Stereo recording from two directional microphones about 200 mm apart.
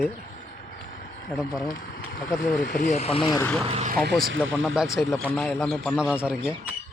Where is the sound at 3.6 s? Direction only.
30° right (ahead or behind).